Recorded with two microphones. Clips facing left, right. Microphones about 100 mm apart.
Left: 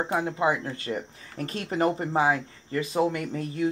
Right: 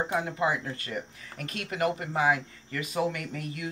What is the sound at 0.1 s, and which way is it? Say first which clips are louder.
Speech: left 3 dB; 25° left (ahead or behind).